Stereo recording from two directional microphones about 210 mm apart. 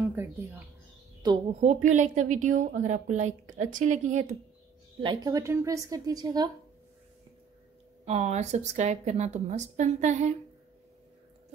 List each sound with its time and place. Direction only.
0.0 s mouse: 10° right (ahead or behind)
1.6 s a woman's voice: 35° right (ahead or behind)
5.0 s a woman's voice: 20° right (ahead or behind)
8.0 s a woman's voice: 30° right (ahead or behind)